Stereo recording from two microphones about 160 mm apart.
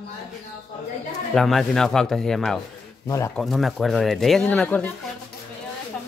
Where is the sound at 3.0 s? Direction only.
20° left (ahead or behind).